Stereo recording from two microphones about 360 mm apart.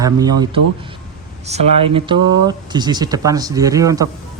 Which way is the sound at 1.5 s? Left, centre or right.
Centre.